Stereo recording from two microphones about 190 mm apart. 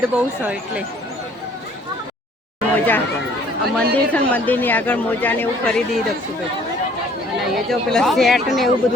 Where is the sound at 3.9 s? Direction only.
10° left (ahead or behind).